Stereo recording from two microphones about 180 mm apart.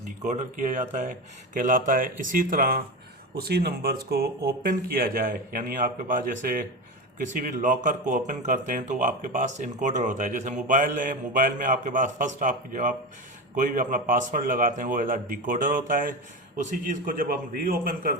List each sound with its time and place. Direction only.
0.3 s speech: 45° right (ahead or behind)